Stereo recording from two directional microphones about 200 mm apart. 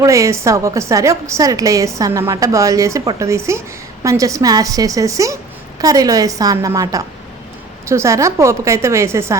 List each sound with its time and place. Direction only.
0.0 s a woman's voice: 15° right (ahead or behind)